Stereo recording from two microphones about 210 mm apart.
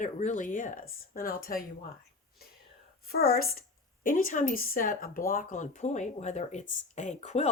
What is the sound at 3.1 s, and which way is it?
A woman's voice, 45° left (ahead or behind).